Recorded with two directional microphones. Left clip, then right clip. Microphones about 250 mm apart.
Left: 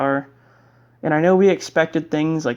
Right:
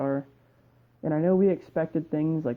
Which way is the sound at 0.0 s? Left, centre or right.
Centre.